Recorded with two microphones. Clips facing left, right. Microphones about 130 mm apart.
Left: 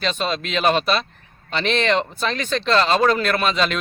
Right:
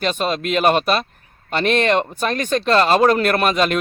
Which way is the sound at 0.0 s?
45° right (ahead or behind).